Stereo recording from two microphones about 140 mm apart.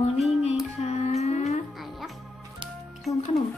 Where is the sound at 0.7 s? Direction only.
50° left (ahead or behind).